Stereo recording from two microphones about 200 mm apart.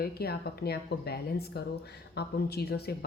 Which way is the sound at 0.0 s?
50° left (ahead or behind).